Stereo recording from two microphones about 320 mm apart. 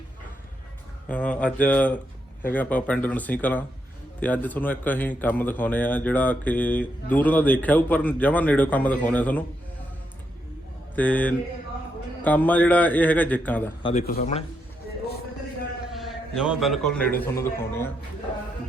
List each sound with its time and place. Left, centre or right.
1.0 s a man's voice: centre
10.9 s a man's voice: centre
13.8 s speech: left
15.9 s a man's voice: centre